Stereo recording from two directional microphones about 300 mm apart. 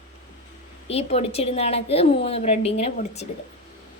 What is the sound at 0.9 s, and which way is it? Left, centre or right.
A woman's voice, centre.